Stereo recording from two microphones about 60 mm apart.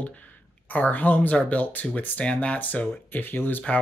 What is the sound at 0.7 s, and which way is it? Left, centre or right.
Speech, left.